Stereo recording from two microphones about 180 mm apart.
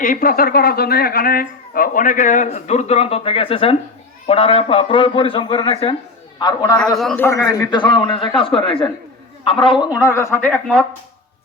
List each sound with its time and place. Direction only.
0.0 s a man's voice: 50° left (ahead or behind); by 6.9 s 20° left (ahead or behind)
6.9 s a man's voice: centre (ahead or behind)
7.3 s a man's voice: 20° left (ahead or behind)